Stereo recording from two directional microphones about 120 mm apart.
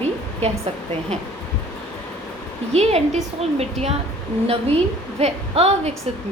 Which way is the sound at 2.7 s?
60° right (ahead or behind).